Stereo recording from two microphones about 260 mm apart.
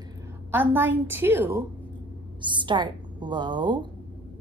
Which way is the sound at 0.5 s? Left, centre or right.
Centre.